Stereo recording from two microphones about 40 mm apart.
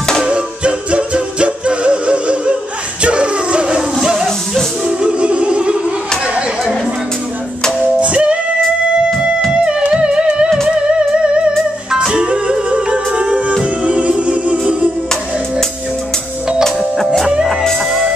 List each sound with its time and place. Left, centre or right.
0.2 s music: right
8.0 s music: right
9.5 s music: right
16.6 s music: centre